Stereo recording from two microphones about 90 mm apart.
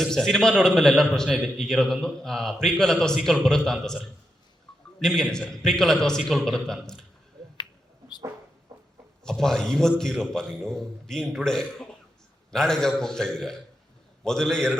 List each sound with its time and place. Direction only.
0.0 s a man's voice: 5° left (ahead or behind)
4.9 s a man's voice: 5° left (ahead or behind)
8.7 s a sound: 35° right (ahead or behind)
9.2 s a man's voice: 5° left (ahead or behind)